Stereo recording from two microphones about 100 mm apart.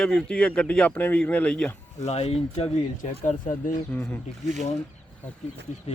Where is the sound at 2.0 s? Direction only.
85° left.